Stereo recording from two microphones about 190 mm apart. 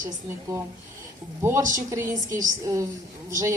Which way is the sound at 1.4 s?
10° right (ahead or behind).